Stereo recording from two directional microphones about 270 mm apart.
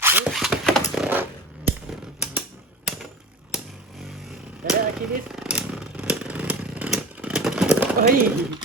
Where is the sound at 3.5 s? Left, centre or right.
Centre.